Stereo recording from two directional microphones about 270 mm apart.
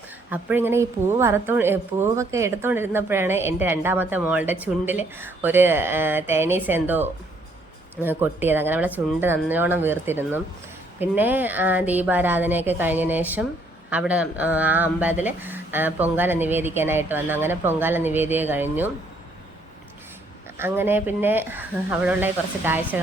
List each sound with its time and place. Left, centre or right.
0.3 s speech: centre
20.6 s speech: centre